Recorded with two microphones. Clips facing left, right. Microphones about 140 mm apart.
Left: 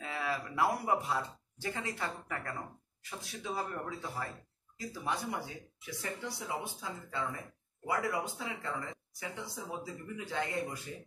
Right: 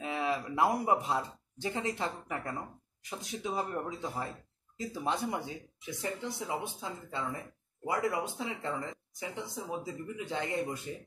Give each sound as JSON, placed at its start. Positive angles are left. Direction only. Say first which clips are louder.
{"t": 0.0, "sound": "speech", "louder": "right 4 dB", "side_deg": -20}